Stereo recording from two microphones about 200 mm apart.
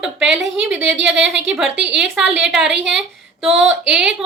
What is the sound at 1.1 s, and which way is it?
Speech, 65° right (ahead or behind).